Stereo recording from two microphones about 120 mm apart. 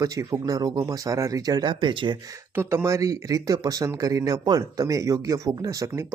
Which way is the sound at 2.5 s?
20° right (ahead or behind).